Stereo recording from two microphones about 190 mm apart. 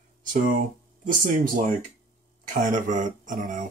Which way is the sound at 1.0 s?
45° right (ahead or behind).